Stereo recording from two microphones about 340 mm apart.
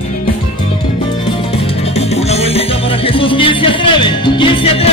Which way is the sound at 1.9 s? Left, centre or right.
Centre.